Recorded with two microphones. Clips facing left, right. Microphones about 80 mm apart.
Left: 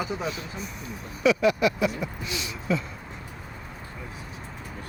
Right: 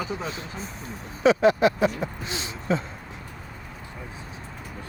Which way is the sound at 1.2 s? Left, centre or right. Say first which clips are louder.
Right 3 dB; right.